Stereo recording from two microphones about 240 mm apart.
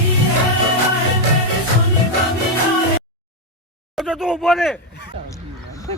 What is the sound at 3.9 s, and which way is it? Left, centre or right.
Speech, centre.